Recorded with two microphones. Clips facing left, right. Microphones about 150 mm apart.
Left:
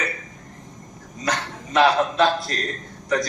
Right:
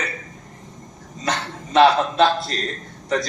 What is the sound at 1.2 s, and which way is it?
A man's voice, 25° right (ahead or behind).